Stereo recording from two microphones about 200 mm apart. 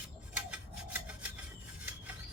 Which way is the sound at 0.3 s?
5° right (ahead or behind).